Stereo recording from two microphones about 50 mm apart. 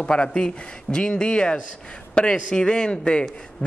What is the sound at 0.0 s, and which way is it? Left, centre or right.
Speech, left.